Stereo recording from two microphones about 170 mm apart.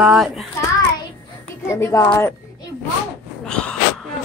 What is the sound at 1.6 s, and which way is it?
Speech, 15° left (ahead or behind).